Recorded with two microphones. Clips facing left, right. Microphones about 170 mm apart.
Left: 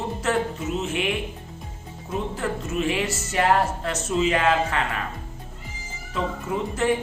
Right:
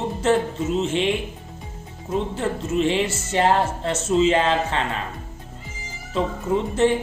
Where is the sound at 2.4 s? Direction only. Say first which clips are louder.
Right 4 dB; 25° right (ahead or behind).